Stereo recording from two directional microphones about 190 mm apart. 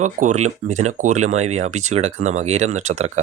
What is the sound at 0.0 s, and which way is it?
Speech, 40° right (ahead or behind).